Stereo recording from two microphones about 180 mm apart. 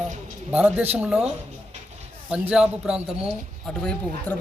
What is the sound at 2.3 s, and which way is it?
Speech, 5° right (ahead or behind).